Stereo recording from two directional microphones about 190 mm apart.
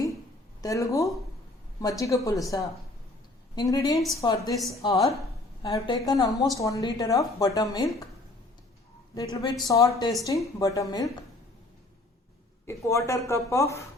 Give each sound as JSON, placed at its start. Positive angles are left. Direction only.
{"t": 0.6, "sound": "a woman's voice", "side_deg": 15}
{"t": 9.1, "sound": "a woman's voice", "side_deg": 20}
{"t": 12.6, "sound": "speech", "side_deg": 15}